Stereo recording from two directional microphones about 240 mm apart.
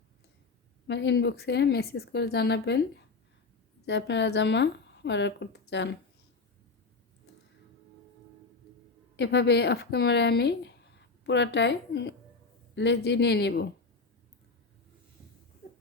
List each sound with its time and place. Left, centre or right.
0.9 s speech: left
9.1 s speech: left